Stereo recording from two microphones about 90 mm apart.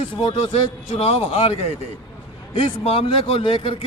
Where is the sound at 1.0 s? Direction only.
80° left.